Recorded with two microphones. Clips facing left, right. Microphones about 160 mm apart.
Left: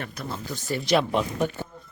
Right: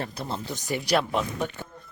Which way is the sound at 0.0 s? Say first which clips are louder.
Right 2 dB; 30° right (ahead or behind).